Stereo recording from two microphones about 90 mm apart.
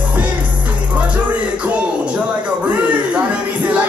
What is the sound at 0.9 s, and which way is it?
Music, 15° right (ahead or behind).